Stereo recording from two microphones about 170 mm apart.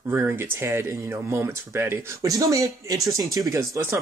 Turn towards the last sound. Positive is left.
turn(degrees=-20)  # may be behind; listen again after turning